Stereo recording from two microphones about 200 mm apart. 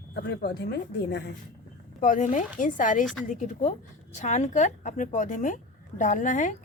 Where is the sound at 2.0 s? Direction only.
40° left (ahead or behind).